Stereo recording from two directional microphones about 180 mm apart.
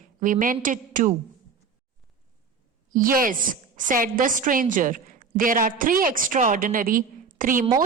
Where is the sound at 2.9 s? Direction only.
50° right (ahead or behind).